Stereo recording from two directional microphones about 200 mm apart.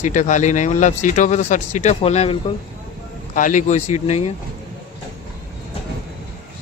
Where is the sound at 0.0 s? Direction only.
40° left (ahead or behind).